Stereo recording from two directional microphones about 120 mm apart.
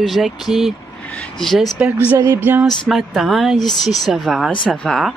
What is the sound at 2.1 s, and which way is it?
Music, 20° right (ahead or behind).